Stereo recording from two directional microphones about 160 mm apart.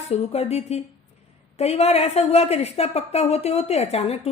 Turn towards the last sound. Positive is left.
turn(degrees=40)  # may be behind; listen again after turning